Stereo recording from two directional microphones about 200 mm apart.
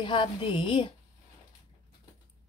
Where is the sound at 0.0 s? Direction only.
25° left (ahead or behind).